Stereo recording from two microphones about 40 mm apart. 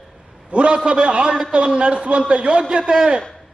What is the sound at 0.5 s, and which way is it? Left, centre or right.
A man's voice, right.